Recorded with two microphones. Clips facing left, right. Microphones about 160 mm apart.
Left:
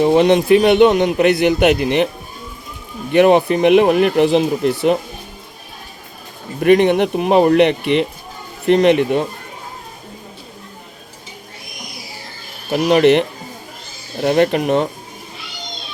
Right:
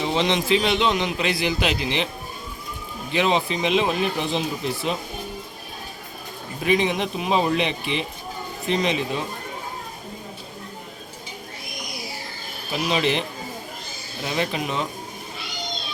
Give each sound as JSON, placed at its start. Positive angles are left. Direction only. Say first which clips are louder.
{"t": 0.0, "sound": "a man's voice", "louder": "left 11 dB", "side_deg": 55}
{"t": 3.1, "sound": "a man's voice", "louder": "left 11 dB", "side_deg": 55}
{"t": 6.6, "sound": "a man's voice", "louder": "left 10 dB", "side_deg": 60}
{"t": 12.7, "sound": "a man's voice", "louder": "left 11 dB", "side_deg": 60}